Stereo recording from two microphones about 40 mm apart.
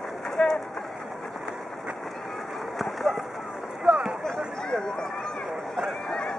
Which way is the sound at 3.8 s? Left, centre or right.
Right.